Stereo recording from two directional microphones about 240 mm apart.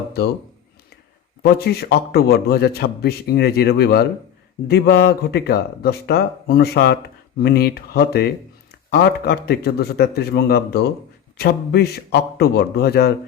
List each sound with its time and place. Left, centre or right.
1.4 s a man's voice: left